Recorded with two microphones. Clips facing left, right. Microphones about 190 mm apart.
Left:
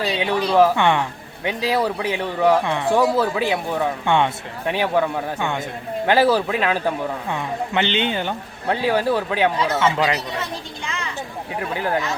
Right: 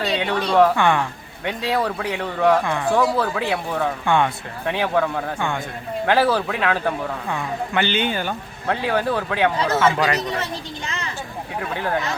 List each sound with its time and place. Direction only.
0.0 s speech: 5° left (ahead or behind)
0.8 s speech: 20° left (ahead or behind)
1.5 s a man's voice: 10° left (ahead or behind)
2.6 s speech: 20° left (ahead or behind)
3.2 s a man's voice: 5° left (ahead or behind)
4.0 s speech: 20° left (ahead or behind)
4.7 s a man's voice: 10° left (ahead or behind)
10.8 s vehicle: 40° right (ahead or behind)
11.7 s a man's voice: 15° left (ahead or behind)